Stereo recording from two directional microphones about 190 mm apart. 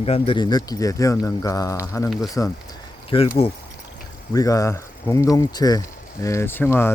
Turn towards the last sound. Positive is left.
turn(degrees=10)  # may be behind; listen again after turning